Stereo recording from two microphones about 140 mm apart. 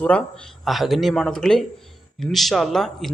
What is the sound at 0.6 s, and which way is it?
Speech, centre (ahead or behind).